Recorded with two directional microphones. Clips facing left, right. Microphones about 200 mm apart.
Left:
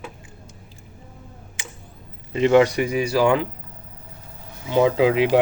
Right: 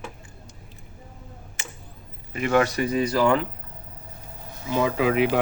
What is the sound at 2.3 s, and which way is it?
Speech, 25° left (ahead or behind).